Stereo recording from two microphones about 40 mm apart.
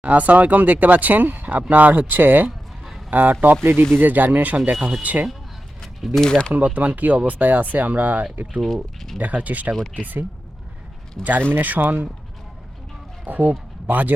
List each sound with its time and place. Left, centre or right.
0.0 s speech: right
3.6 s speech: right
3.9 s speech: right
4.7 s speech: centre
5.0 s speech: right
6.1 s speech: centre
6.7 s speech: right
8.7 s speech: centre
9.1 s speech: right
13.2 s speech: right